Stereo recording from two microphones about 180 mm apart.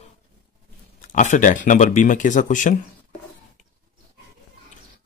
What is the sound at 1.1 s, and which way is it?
Speech, 45° left (ahead or behind).